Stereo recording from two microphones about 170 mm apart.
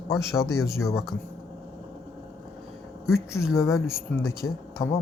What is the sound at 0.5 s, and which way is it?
Speech, 15° left (ahead or behind).